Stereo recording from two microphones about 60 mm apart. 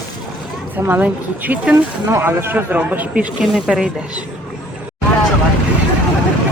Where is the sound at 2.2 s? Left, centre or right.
Right.